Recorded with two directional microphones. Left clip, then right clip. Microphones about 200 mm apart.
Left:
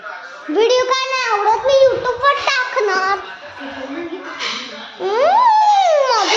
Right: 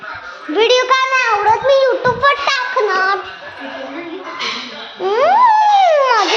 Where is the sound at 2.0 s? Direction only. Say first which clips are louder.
Right 2 dB; 20° right (ahead or behind).